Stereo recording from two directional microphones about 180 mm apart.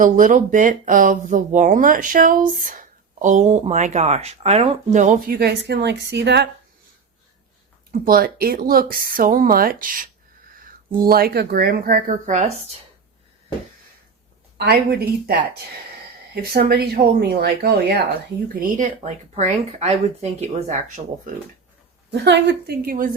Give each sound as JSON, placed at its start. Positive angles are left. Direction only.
{"t": 0.0, "sound": "speech", "side_deg": -50}
{"t": 7.9, "sound": "speech", "side_deg": -55}
{"t": 14.6, "sound": "speech", "side_deg": -60}
{"t": 22.1, "sound": "speech", "side_deg": -70}